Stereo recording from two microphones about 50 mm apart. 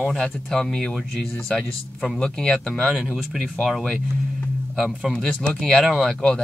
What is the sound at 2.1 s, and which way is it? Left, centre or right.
Speech, centre.